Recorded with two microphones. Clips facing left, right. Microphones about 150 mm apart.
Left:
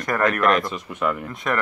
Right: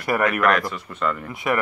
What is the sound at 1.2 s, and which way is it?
Speech, 5° right (ahead or behind).